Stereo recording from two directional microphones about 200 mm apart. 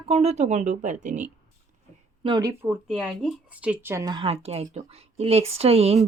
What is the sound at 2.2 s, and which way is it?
Speech, 20° right (ahead or behind).